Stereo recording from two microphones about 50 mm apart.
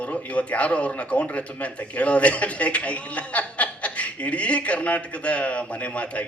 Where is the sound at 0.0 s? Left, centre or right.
Left.